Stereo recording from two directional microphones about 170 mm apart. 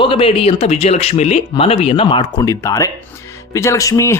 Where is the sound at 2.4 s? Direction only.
20° left (ahead or behind).